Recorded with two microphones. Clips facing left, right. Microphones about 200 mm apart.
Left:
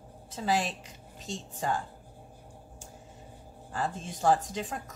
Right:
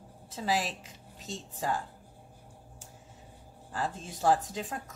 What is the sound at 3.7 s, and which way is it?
A woman's voice, centre (ahead or behind).